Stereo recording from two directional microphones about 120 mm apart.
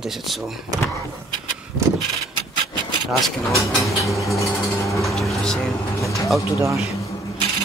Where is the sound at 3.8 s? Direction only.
25° left (ahead or behind).